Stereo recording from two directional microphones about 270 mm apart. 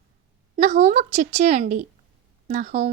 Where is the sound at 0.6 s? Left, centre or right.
Right.